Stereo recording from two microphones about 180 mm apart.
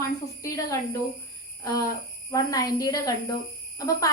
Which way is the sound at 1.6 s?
20° left (ahead or behind).